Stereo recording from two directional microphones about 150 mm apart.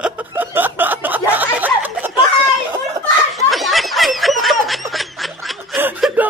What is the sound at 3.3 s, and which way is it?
Snicker, centre (ahead or behind).